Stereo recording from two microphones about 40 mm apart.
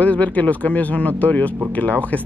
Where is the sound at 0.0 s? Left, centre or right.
Left.